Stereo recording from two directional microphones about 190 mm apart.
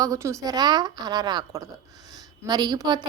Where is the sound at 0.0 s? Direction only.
15° right (ahead or behind).